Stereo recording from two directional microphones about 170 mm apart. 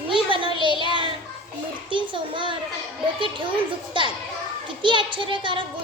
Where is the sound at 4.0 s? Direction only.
30° right (ahead or behind).